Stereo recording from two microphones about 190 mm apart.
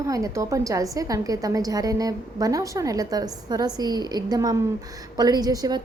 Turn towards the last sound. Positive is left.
turn(degrees=-20)  # may be behind; listen again after turning